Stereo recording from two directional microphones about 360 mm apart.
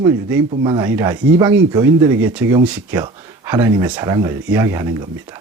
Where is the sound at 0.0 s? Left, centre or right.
Centre.